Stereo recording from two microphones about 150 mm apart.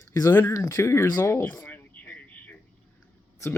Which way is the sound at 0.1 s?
20° left (ahead or behind).